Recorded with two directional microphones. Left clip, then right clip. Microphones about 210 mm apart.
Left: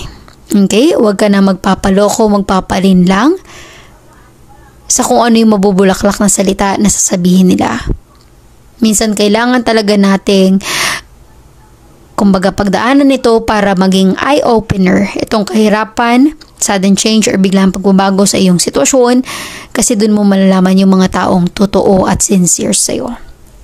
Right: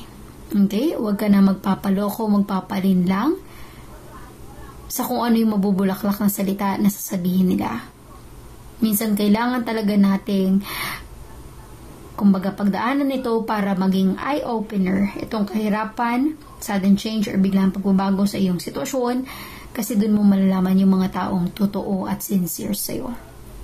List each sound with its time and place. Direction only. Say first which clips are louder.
0.5 s speech: left 13 dB; 45° left (ahead or behind)
4.8 s speech: left 14 dB; 45° left (ahead or behind)
8.8 s speech: left 12 dB; 40° left (ahead or behind)
12.2 s speech: left 12 dB; 50° left (ahead or behind)